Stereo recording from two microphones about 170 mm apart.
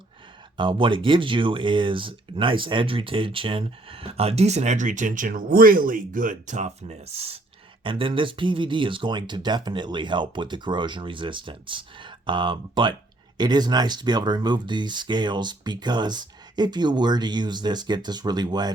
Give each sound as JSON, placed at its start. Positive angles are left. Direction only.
{"t": 0.5, "sound": "speech", "side_deg": -30}